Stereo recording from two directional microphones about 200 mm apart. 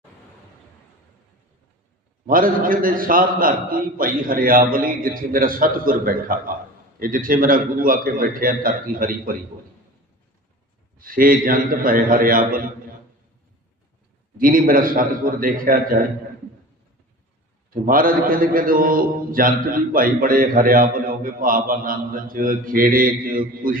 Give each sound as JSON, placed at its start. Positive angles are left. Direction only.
{"t": 2.2, "sound": "a man's voice", "side_deg": -45}
{"t": 10.9, "sound": "a man's voice", "side_deg": -45}
{"t": 14.3, "sound": "a man's voice", "side_deg": -45}
{"t": 17.7, "sound": "a man's voice", "side_deg": -45}